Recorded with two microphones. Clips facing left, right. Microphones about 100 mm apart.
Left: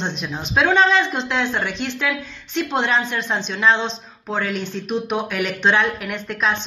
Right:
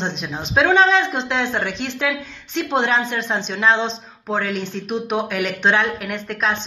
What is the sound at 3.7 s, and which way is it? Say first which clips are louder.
Speech: even; 10° right (ahead or behind).